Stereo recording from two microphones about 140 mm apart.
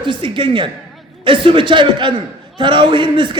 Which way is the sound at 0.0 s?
35° right (ahead or behind).